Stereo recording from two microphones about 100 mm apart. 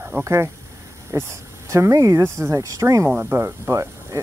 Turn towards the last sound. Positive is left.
turn(degrees=-25)  # may be behind; listen again after turning